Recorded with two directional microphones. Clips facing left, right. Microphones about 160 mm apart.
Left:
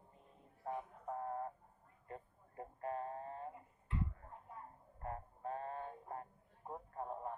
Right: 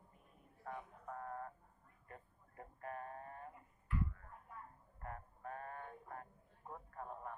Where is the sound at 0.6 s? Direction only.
25° left (ahead or behind).